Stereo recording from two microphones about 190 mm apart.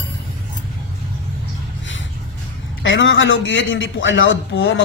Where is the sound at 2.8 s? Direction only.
80° left.